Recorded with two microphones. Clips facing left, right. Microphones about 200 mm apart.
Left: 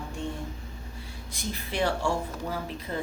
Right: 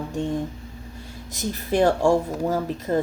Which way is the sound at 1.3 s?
40° right (ahead or behind).